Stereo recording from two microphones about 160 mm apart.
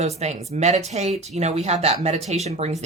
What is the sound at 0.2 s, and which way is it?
Speech, 45° right (ahead or behind).